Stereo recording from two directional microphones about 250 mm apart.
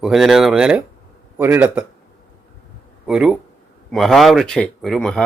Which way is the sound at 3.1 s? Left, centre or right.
Centre.